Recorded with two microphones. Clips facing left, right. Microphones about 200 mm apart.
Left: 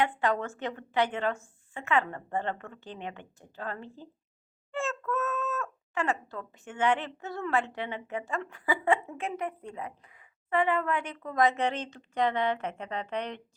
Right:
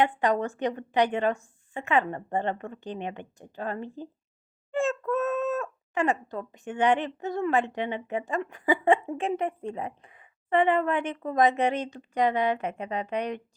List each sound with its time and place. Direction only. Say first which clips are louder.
0.0 s a woman's voice: right 4 dB; 15° right (ahead or behind)